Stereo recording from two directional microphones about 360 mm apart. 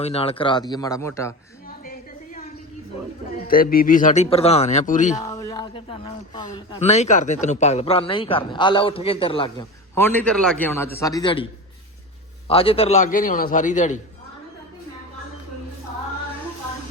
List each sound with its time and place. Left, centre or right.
0.0 s a man's voice: centre
1.8 s a sound: left
3.3 s a man's voice: left
5.1 s a man's voice: centre
12.5 s a man's voice: centre